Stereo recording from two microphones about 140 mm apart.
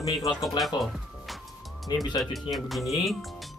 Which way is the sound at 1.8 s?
30° left (ahead or behind).